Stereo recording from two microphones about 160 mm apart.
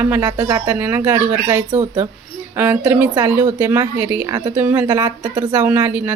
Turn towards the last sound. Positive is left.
turn(degrees=-10)  # may be behind; listen again after turning